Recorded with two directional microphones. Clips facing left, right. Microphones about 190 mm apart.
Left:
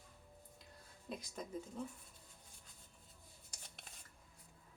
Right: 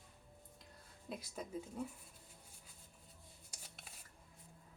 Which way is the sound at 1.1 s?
5° right (ahead or behind).